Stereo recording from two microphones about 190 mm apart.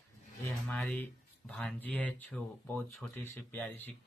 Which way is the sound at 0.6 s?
5° left (ahead or behind).